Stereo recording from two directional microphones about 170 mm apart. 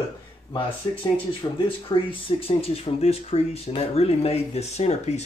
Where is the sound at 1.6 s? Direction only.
30° left (ahead or behind).